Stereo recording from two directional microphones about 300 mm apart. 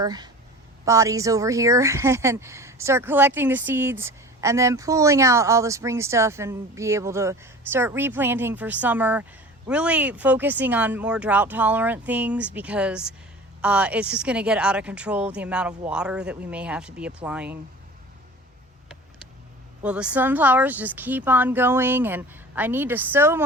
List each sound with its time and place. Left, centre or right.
0.0 s speech: centre
19.8 s speech: centre